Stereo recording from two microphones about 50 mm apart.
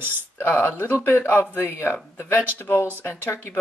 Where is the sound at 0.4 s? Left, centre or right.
Left.